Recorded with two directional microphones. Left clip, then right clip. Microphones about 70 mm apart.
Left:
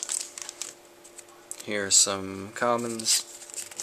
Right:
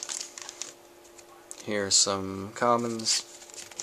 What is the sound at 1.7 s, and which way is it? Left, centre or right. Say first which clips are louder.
Speech: left 1 dB; right.